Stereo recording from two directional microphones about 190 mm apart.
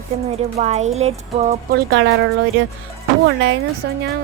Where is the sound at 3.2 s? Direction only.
70° right (ahead or behind).